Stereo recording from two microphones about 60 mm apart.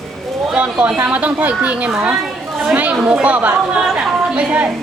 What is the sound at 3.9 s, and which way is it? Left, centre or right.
Chatter, right.